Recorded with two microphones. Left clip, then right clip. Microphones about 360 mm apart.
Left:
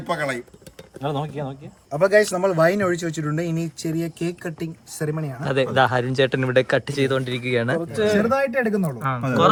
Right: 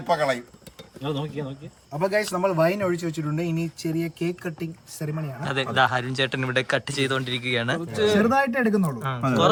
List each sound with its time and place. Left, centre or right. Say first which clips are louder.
0.1 s speech: right 2 dB; centre
1.0 s cutlery: left 3 dB; left
1.9 s speech: left 7 dB; centre